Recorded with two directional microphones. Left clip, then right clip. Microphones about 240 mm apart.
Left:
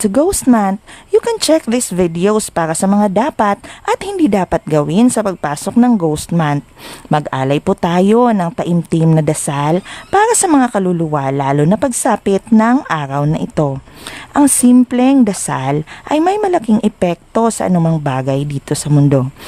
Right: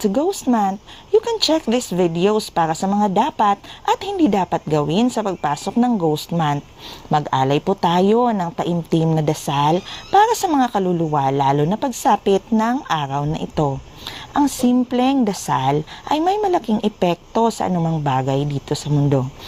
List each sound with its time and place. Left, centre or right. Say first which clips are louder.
0.0 s a woman's voice: left 6 dB; left
14.7 s speech: left 7 dB; left